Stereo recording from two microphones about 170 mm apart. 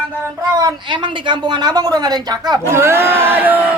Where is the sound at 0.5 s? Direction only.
25° right (ahead or behind).